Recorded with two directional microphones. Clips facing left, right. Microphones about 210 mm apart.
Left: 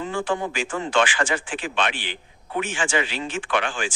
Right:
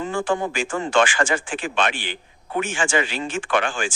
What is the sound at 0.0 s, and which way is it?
Speech, 45° right (ahead or behind).